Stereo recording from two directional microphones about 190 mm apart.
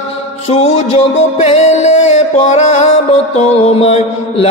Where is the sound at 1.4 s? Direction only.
35° left (ahead or behind).